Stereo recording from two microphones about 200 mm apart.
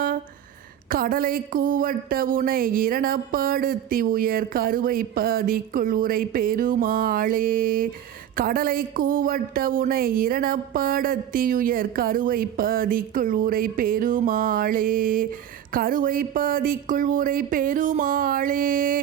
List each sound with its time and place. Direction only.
0.9 s speech: 45° right (ahead or behind)